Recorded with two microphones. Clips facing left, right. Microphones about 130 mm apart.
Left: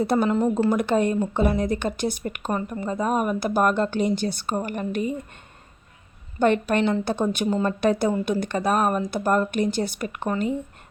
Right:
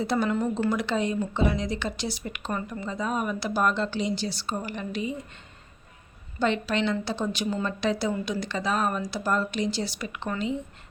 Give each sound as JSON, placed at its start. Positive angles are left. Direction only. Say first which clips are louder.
{"t": 0.0, "sound": "speech", "louder": "left 5 dB", "side_deg": 50}
{"t": 0.3, "sound": "speech", "louder": "left 5 dB", "side_deg": 35}
{"t": 0.5, "sound": "speech", "louder": "left 5 dB", "side_deg": 50}
{"t": 6.4, "sound": "speech", "louder": "left 5 dB", "side_deg": 55}